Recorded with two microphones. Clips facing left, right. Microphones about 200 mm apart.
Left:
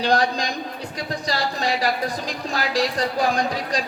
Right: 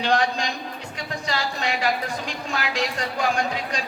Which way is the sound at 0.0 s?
35° left (ahead or behind).